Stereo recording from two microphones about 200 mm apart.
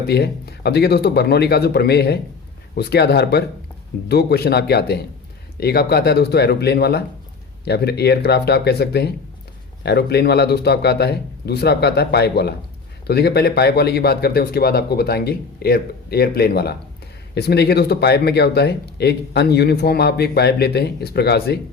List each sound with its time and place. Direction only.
0.1 s speech: 55° left (ahead or behind)